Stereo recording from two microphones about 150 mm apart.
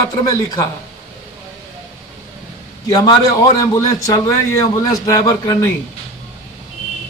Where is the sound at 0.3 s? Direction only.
25° left (ahead or behind).